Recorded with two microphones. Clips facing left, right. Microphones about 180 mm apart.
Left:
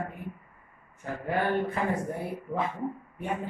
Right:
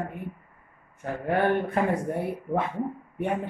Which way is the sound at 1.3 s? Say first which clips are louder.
Right 3 dB; 60° right (ahead or behind).